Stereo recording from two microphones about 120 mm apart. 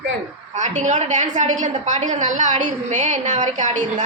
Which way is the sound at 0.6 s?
80° right.